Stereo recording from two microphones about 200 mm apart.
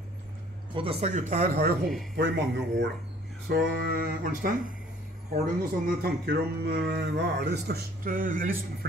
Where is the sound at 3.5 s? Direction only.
50° right (ahead or behind).